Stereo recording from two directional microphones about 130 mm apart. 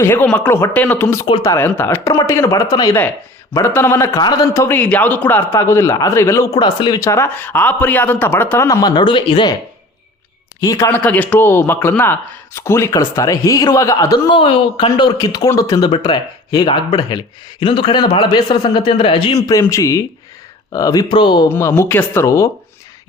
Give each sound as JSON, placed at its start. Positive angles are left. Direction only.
{"t": 0.0, "sound": "speech", "side_deg": 20}
{"t": 4.1, "sound": "speech", "side_deg": 35}
{"t": 4.5, "sound": "speech", "side_deg": 20}
{"t": 7.0, "sound": "speech", "side_deg": 20}
{"t": 10.6, "sound": "speech", "side_deg": 25}
{"t": 10.9, "sound": "speech", "side_deg": 15}
{"t": 14.3, "sound": "speech", "side_deg": 40}
{"t": 19.7, "sound": "speech", "side_deg": 25}
{"t": 21.5, "sound": "speech", "side_deg": 20}